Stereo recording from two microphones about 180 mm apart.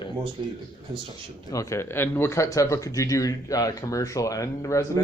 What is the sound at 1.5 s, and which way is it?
Speech, 15° left (ahead or behind).